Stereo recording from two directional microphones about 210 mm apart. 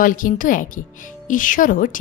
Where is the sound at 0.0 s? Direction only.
40° left (ahead or behind).